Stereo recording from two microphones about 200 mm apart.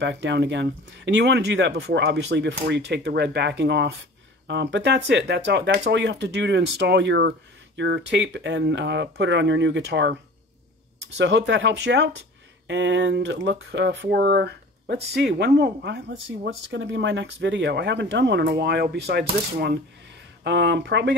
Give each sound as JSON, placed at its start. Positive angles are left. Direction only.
{"t": 0.0, "sound": "speech", "side_deg": -60}
{"t": 11.1, "sound": "speech", "side_deg": -65}